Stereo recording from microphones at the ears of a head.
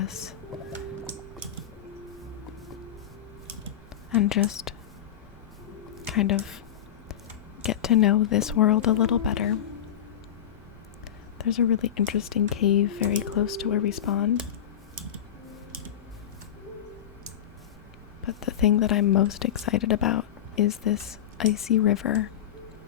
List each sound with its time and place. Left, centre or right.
0.0 s music: left
0.8 s music: right
4.2 s speech: left
6.1 s speech: left
7.6 s speech: left
11.3 s speech: left
18.3 s speech: left